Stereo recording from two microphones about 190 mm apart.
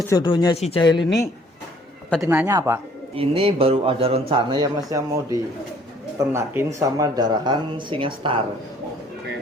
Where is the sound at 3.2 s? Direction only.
30° right (ahead or behind).